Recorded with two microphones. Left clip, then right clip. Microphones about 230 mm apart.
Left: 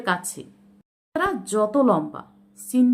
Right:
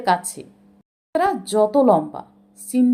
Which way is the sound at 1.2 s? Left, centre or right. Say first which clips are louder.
Right 4 dB; centre.